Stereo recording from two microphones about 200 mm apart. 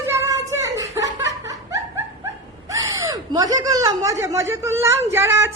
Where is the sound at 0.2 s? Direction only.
15° right (ahead or behind).